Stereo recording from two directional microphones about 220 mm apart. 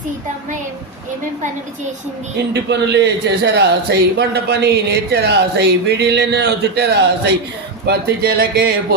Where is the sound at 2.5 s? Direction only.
50° right (ahead or behind).